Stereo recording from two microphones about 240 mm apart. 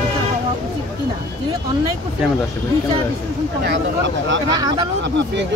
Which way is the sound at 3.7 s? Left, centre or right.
Right.